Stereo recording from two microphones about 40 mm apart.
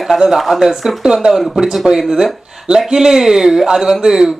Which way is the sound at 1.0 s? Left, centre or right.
Centre.